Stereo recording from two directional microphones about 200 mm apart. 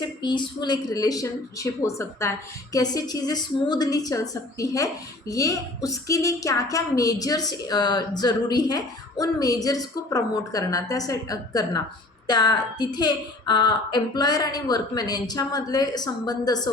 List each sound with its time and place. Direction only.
0.2 s a woman's voice: 20° left (ahead or behind)